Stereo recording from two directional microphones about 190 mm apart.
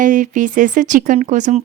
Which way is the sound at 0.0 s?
40° right (ahead or behind).